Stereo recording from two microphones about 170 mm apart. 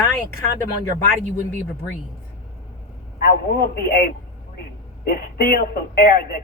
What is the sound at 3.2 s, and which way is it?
A man's voice, 60° left (ahead or behind).